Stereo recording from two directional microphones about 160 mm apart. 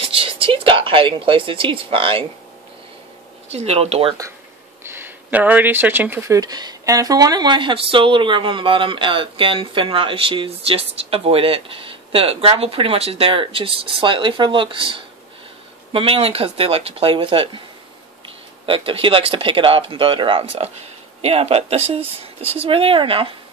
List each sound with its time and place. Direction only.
0.0 s speech: 35° right (ahead or behind)
3.4 s speech: 40° right (ahead or behind)
4.8 s speech: 15° right (ahead or behind); by 17.5 s 35° right (ahead or behind)
18.7 s speech: 35° right (ahead or behind)